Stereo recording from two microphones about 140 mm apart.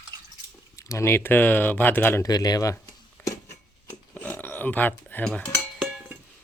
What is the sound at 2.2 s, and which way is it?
Speech, 30° left (ahead or behind).